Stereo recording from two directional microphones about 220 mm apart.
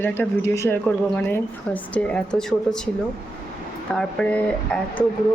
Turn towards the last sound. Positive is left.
turn(degrees=5)  # may be behind; listen again after turning